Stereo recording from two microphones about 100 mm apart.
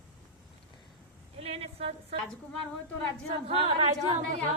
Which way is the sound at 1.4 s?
80° right.